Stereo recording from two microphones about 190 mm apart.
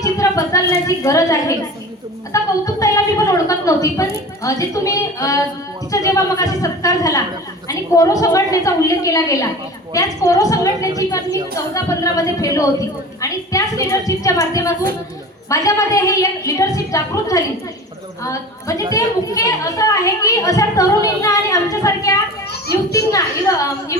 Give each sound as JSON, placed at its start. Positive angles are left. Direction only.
{"t": 0.0, "sound": "a woman's voice", "side_deg": 15}
{"t": 2.3, "sound": "a sound", "side_deg": 15}
{"t": 4.4, "sound": "a woman's voice", "side_deg": 15}
{"t": 18.9, "sound": "a woman's voice", "side_deg": 15}